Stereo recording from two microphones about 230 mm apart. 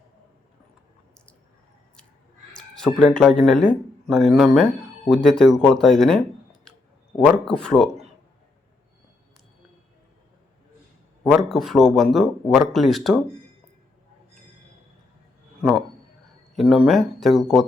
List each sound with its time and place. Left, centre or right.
2.6 s speech: centre
11.3 s speech: centre
16.6 s speech: centre